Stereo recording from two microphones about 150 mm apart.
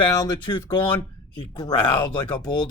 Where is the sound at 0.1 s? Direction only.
25° left (ahead or behind).